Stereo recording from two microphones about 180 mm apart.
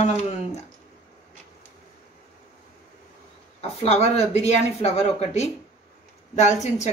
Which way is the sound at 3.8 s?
35° left (ahead or behind).